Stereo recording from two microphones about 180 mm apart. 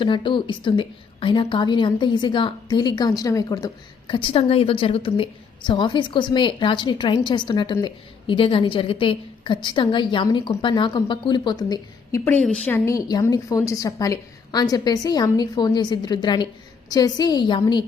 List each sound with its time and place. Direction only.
0.0 s a woman's voice: 25° left (ahead or behind)
12.2 s a woman's voice: 10° left (ahead or behind); by 17.8 s 25° left (ahead or behind)